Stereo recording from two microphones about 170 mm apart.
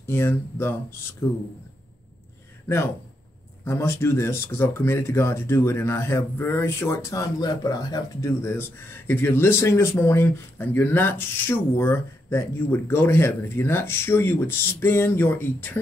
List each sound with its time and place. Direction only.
0.0 s speech: 15° left (ahead or behind)
3.6 s speech: 15° left (ahead or behind)